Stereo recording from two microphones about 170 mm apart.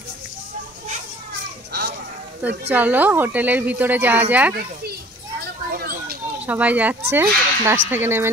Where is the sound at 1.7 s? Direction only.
75° right (ahead or behind).